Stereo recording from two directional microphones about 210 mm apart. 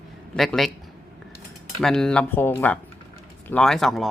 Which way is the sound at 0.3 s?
Centre (ahead or behind).